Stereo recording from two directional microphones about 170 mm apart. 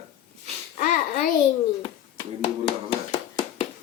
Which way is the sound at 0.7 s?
50° left (ahead or behind).